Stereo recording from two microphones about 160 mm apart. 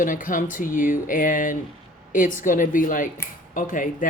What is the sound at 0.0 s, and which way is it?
Speech, 55° left (ahead or behind).